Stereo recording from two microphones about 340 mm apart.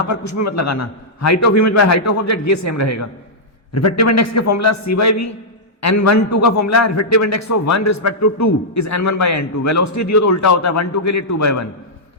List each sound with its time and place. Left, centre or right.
0.0 s a man's voice: left